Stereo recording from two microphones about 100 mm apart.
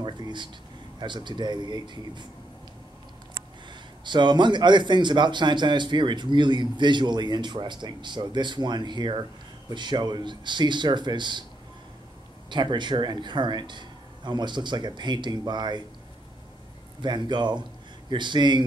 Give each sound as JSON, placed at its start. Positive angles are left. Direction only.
{"t": 0.0, "sound": "a man's voice", "side_deg": -50}
{"t": 4.0, "sound": "a man's voice", "side_deg": -50}
{"t": 12.4, "sound": "a man's voice", "side_deg": -50}
{"t": 17.0, "sound": "a man's voice", "side_deg": -50}